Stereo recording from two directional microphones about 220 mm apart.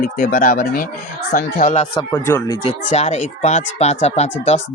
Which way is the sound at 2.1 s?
15° left (ahead or behind).